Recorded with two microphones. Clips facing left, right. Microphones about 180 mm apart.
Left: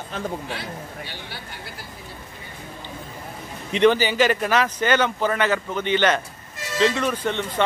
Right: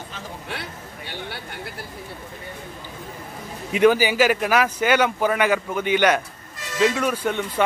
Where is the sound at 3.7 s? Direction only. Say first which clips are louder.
Right 1 dB; 10° right (ahead or behind).